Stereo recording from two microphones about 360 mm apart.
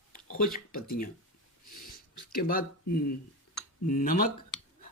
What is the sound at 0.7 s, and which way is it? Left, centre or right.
Speech, left.